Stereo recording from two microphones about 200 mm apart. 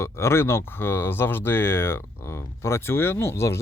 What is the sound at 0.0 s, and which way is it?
Speech, 15° left (ahead or behind).